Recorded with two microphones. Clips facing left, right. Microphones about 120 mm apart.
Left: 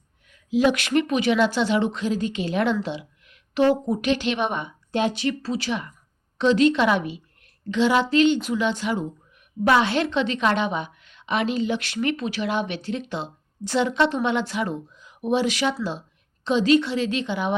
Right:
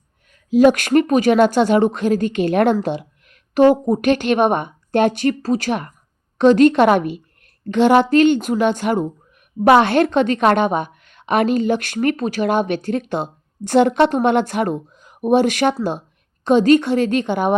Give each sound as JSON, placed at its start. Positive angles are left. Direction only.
{"t": 0.3, "sound": "a woman's voice", "side_deg": -45}